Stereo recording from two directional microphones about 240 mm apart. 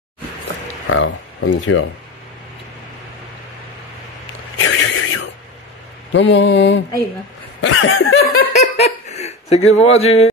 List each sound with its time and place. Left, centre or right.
0.8 s speech: left
4.6 s a sound: left
6.1 s mantra: left
7.6 s laughter: left
8.2 s giggle: left
8.5 s a sound: left
9.7 s mantra: left
9.9 s mantra: left